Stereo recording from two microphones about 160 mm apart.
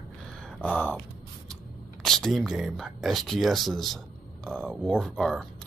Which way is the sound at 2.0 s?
5° left (ahead or behind).